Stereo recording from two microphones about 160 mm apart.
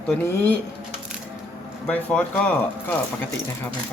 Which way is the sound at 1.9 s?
10° left (ahead or behind).